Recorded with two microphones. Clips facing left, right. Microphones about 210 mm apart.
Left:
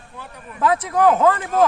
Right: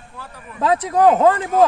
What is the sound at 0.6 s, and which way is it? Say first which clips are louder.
Speech: right 2 dB; 30° right (ahead or behind).